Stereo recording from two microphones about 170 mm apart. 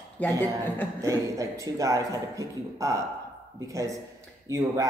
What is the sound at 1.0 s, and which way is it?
Speech, 20° right (ahead or behind).